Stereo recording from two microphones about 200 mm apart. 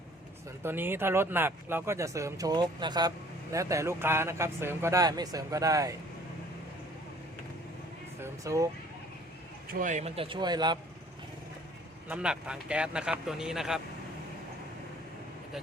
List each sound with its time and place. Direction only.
0.6 s speech: 10° right (ahead or behind)
8.2 s speech: 15° right (ahead or behind)
9.7 s speech: 40° right (ahead or behind); by 10.8 s 20° right (ahead or behind)
12.0 s speech: 5° right (ahead or behind)